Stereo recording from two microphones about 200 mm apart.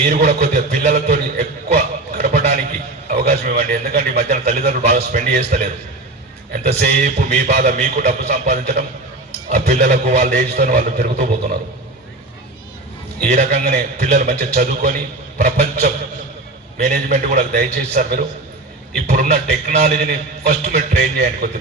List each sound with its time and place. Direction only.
0.1 s a man's voice: 45° right (ahead or behind)
0.9 s a sound: 50° right (ahead or behind)
3.1 s a man's voice: 45° right (ahead or behind)
6.7 s a man's voice: 45° right (ahead or behind)
13.3 s a man's voice: 45° right (ahead or behind)